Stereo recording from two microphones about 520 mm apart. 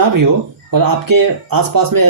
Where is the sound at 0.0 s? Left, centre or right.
Right.